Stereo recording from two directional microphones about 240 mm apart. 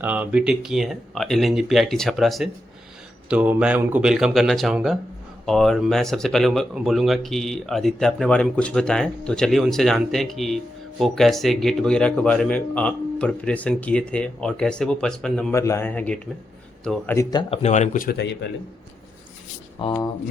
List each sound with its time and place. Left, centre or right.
0.0 s speech: centre
17.5 s speech: left
19.8 s speech: centre